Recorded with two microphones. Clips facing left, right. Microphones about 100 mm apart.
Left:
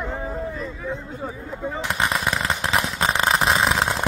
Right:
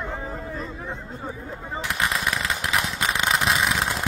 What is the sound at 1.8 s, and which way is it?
Firecracker, 25° left (ahead or behind).